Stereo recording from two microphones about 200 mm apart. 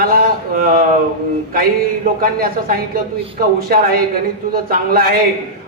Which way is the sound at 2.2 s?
45° right (ahead or behind).